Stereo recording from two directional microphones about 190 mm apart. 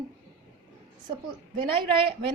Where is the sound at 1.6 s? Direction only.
30° right (ahead or behind).